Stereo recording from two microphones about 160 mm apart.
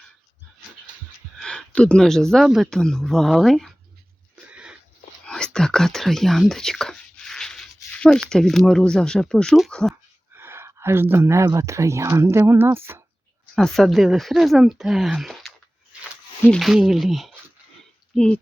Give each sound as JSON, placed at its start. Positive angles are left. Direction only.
{"t": 1.4, "sound": "speech", "side_deg": 5}
{"t": 4.5, "sound": "wheeze", "side_deg": -5}
{"t": 5.2, "sound": "speech", "side_deg": 5}
{"t": 10.3, "sound": "speech", "side_deg": -15}
{"t": 13.6, "sound": "speech", "side_deg": 0}